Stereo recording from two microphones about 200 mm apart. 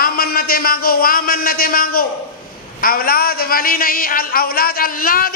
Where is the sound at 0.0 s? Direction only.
50° left (ahead or behind).